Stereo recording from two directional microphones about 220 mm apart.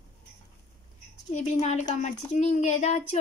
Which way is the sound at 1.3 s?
30° left (ahead or behind).